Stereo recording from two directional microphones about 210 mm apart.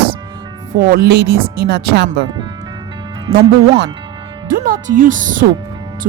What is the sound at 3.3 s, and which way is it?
Speech, 15° right (ahead or behind).